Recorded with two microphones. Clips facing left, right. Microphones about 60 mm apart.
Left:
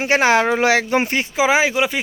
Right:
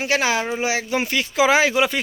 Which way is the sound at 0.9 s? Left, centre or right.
Left.